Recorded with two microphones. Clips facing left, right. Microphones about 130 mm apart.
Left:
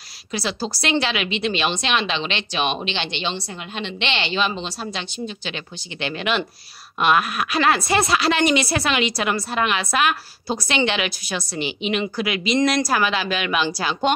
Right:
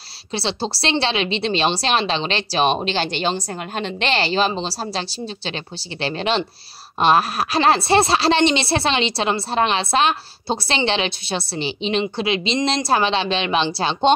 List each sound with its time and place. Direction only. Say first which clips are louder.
0.3 s a woman's voice: right 2 dB; 30° right (ahead or behind)